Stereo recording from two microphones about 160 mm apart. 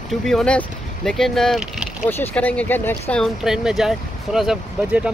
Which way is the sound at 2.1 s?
10° left (ahead or behind).